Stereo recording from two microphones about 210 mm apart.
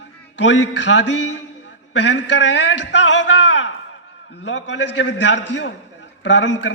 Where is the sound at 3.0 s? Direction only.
60° left (ahead or behind).